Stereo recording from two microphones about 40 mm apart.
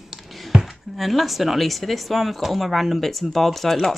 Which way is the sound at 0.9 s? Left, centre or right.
Centre.